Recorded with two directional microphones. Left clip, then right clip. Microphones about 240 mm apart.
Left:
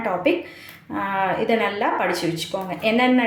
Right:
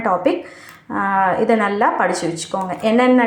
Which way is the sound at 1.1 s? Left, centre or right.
Centre.